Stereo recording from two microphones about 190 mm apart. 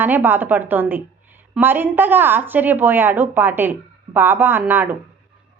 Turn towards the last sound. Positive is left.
turn(degrees=-10)  # may be behind; listen again after turning